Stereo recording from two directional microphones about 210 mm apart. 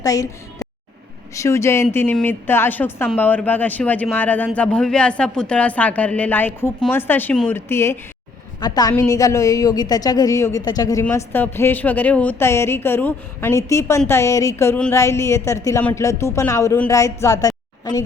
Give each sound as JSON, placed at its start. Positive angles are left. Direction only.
{"t": 0.0, "sound": "a woman's voice", "side_deg": 15}